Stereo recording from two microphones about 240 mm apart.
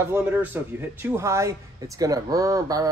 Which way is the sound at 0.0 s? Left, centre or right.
Centre.